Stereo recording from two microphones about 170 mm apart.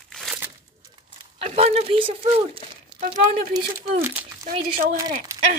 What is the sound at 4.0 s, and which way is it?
Speech, 15° right (ahead or behind).